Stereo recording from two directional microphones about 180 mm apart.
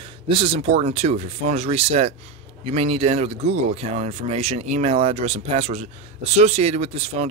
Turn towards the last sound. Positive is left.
turn(degrees=-35)  # may be behind; listen again after turning